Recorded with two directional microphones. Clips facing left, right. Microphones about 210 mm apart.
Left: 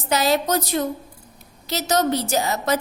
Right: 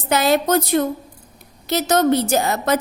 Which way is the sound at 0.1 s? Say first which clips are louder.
Right 3 dB; 55° right (ahead or behind).